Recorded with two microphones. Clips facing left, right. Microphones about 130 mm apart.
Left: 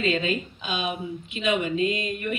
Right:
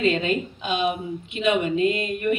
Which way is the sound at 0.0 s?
55° right (ahead or behind).